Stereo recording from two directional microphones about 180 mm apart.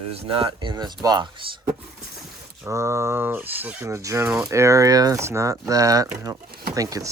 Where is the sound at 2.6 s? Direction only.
15° right (ahead or behind).